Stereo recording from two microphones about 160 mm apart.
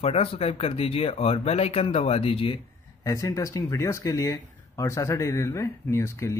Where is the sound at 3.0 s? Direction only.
20° left (ahead or behind).